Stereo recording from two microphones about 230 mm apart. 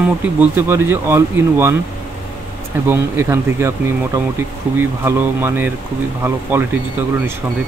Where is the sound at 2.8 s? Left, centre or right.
Centre.